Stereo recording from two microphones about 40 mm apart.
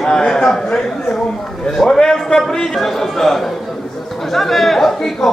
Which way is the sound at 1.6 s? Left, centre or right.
Centre.